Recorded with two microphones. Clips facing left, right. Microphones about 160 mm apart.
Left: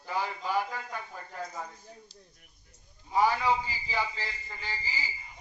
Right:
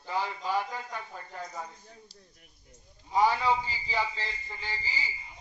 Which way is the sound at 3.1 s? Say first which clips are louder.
Right 1 dB; 20° right (ahead or behind).